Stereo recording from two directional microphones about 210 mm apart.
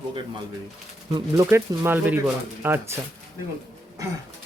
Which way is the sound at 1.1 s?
15° right (ahead or behind).